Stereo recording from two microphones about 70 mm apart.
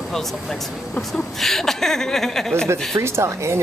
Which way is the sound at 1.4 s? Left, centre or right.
Centre.